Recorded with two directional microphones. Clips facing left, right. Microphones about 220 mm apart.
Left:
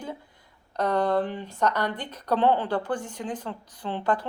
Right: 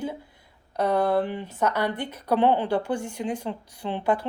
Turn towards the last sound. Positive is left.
turn(degrees=-10)  # may be behind; listen again after turning